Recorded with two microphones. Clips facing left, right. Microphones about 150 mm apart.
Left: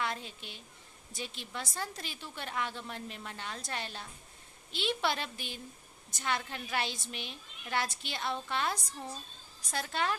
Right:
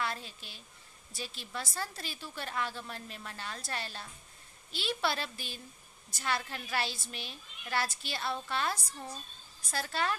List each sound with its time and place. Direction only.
0.0 s a child's voice: 20° left (ahead or behind)